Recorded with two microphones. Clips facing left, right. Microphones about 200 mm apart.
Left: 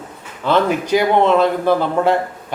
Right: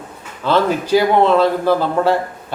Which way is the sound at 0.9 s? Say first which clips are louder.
Right 1 dB; 20° left (ahead or behind).